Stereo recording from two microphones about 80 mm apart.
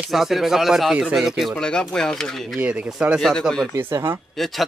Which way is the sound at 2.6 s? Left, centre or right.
Centre.